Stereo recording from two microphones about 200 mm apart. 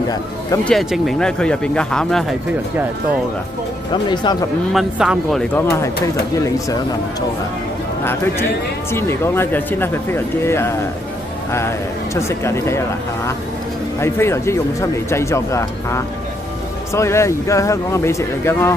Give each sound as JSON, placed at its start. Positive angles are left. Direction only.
{"t": 0.7, "sound": "speech", "side_deg": 0}
{"t": 3.9, "sound": "speech", "side_deg": 20}
{"t": 4.7, "sound": "speech", "side_deg": -5}
{"t": 5.5, "sound": "speech", "side_deg": 15}
{"t": 13.9, "sound": "speech", "side_deg": 10}